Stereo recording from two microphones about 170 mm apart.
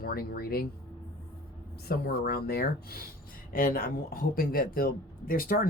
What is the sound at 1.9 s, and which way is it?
Speech, 60° left (ahead or behind).